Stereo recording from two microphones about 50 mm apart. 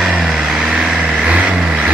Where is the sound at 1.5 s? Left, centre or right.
Right.